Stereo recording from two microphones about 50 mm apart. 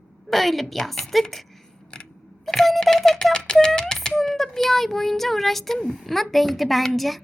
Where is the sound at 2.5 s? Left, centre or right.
Centre.